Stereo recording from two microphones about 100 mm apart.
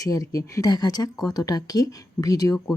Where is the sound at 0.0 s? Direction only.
35° left (ahead or behind).